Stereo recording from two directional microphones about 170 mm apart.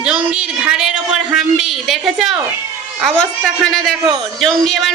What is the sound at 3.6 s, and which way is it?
Speech, 5° left (ahead or behind).